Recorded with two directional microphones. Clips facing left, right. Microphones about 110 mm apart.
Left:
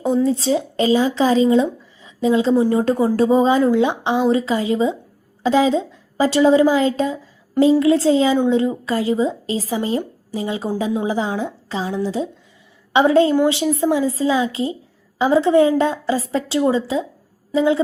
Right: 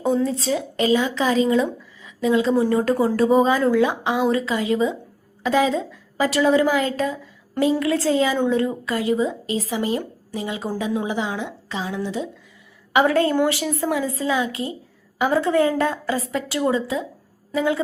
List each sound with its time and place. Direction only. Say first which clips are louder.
0.0 s speech: left 2 dB; centre (ahead or behind)
0.3 s a woman's voice: left 5 dB; 30° left (ahead or behind)
12.9 s a woman's voice: left 4 dB; 25° left (ahead or behind)